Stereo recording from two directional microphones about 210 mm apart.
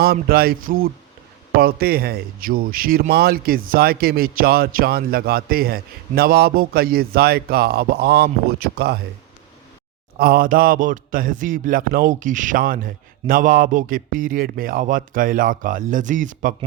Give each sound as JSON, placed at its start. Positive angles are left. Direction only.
{"t": 0.0, "sound": "speech", "side_deg": -45}
{"t": 10.2, "sound": "speech", "side_deg": -45}